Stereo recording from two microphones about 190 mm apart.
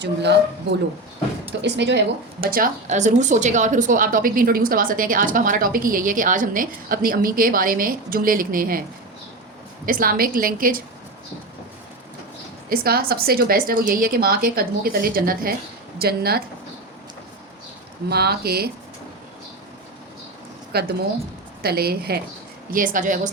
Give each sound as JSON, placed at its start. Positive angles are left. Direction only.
{"t": 0.0, "sound": "a woman's voice", "side_deg": -65}
{"t": 1.6, "sound": "speech", "side_deg": -65}
{"t": 9.8, "sound": "speech", "side_deg": -50}
{"t": 12.6, "sound": "a woman's voice", "side_deg": -50}
{"t": 18.1, "sound": "a woman's voice", "side_deg": -55}
{"t": 20.7, "sound": "a woman's voice", "side_deg": -55}